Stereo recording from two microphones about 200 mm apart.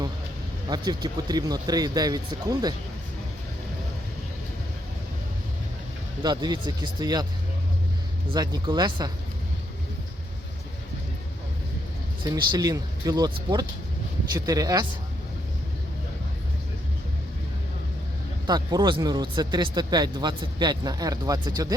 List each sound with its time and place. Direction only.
0.7 s speech: 20° right (ahead or behind)
6.2 s speech: 20° right (ahead or behind)
8.3 s speech: 20° right (ahead or behind)
12.2 s speech: 20° right (ahead or behind)
18.4 s speech: 20° right (ahead or behind)